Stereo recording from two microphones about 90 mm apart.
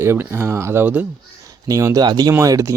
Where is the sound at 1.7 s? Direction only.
40° right (ahead or behind).